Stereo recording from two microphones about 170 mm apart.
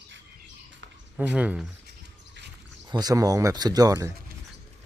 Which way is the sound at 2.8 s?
25° right (ahead or behind).